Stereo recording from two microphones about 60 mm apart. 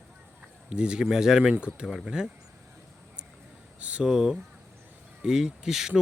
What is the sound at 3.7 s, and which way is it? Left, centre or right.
Speech, right.